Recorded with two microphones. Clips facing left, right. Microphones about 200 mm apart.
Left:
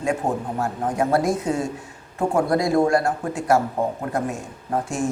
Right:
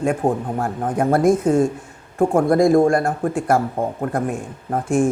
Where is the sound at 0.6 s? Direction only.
55° right (ahead or behind).